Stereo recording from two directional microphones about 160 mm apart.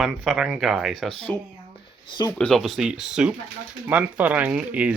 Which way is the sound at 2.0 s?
25° left (ahead or behind).